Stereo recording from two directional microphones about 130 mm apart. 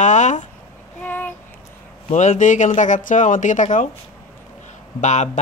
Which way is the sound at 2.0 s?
65° left (ahead or behind).